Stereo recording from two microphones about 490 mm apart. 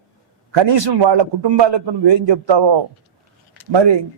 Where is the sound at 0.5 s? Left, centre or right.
Right.